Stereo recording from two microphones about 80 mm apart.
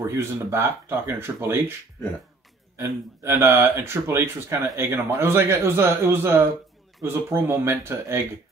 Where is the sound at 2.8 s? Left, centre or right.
Right.